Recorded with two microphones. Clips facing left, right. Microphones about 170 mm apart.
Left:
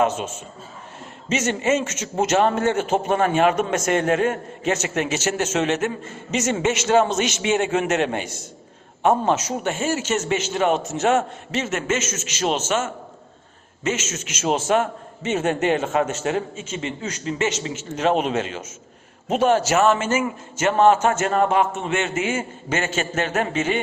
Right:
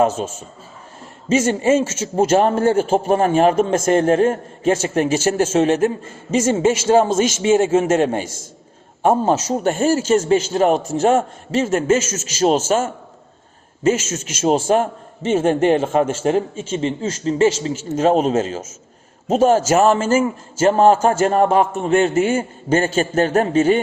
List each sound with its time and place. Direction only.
1.3 s a man's voice: 30° right (ahead or behind)